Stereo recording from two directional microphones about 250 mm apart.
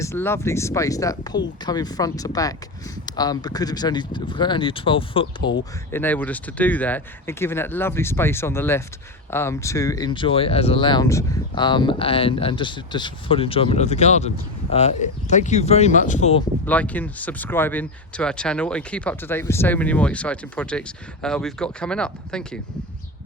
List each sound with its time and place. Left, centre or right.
0.0 s speech: centre
5.4 s speech: left
5.9 s speech: centre; by 16.4 s left
16.6 s speech: centre